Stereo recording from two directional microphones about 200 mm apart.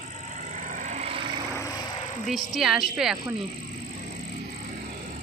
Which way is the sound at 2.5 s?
Centre (ahead or behind).